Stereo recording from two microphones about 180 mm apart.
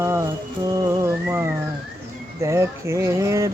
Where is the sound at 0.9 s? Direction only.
15° right (ahead or behind).